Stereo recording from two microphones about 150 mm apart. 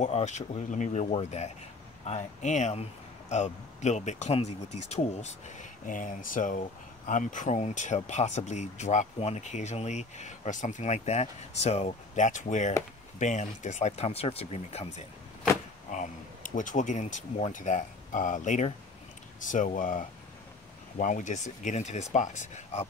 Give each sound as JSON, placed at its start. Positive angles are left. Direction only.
{"t": 0.0, "sound": "speech", "side_deg": 50}
{"t": 15.9, "sound": "speech", "side_deg": 60}